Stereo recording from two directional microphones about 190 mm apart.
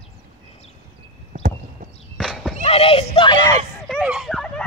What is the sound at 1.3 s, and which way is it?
Clip-clop, 40° right (ahead or behind).